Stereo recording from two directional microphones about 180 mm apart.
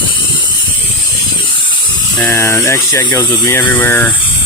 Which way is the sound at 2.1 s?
15° left (ahead or behind).